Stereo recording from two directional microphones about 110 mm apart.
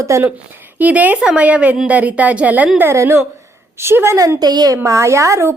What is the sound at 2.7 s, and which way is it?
A woman's voice, 25° right (ahead or behind).